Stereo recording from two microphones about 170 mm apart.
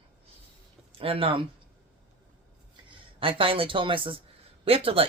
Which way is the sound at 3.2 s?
30° right (ahead or behind).